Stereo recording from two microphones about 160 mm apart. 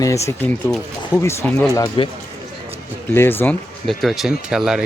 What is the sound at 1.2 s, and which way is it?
Speech, 15° left (ahead or behind).